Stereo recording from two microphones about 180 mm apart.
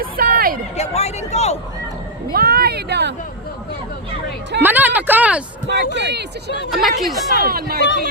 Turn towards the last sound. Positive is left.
turn(degrees=-60)  # may be behind; listen again after turning